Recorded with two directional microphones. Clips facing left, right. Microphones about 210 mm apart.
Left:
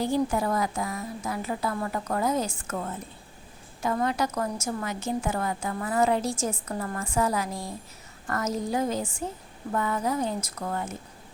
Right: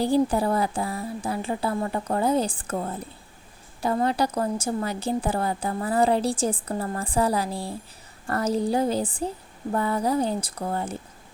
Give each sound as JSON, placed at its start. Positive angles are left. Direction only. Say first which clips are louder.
{"t": 0.0, "sound": "a woman's voice", "louder": "right 4 dB", "side_deg": -35}